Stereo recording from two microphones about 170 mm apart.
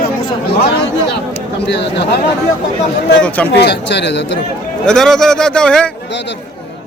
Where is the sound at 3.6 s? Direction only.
90° left.